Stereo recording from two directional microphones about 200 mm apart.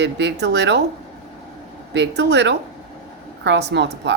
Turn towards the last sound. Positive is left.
turn(degrees=-60)  # may be behind; listen again after turning